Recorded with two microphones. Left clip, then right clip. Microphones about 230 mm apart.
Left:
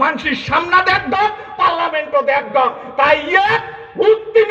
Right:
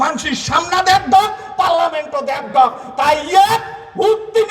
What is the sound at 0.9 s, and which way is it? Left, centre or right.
A man's voice, right.